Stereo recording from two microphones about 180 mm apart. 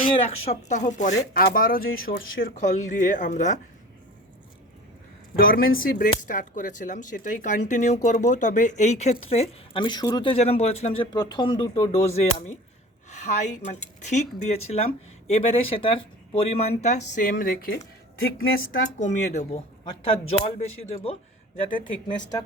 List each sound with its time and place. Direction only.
0.0 s speech: 30° left (ahead or behind)
5.4 s speech: 50° left (ahead or behind); by 11.0 s 35° left (ahead or behind)
11.1 s speech: 25° left (ahead or behind)